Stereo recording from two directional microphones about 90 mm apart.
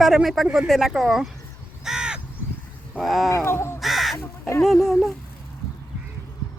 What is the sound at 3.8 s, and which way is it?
Crow, centre (ahead or behind).